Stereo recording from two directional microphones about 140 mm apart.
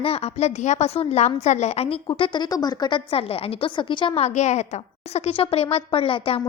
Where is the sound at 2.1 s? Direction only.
30° left (ahead or behind).